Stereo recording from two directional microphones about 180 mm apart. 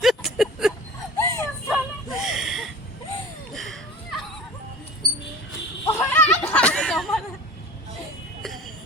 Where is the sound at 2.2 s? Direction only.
Centre (ahead or behind).